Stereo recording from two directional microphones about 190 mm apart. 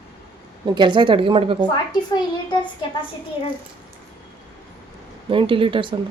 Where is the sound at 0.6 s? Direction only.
25° right (ahead or behind).